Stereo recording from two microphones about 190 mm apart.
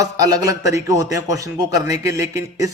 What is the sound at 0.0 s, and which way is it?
A man's voice, 20° right (ahead or behind).